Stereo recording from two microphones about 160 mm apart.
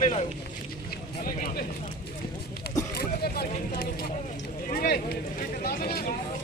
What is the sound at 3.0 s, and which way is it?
Vehicle, 75° left (ahead or behind).